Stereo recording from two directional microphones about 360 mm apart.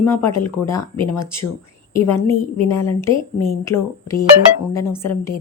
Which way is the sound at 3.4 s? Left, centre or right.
Centre.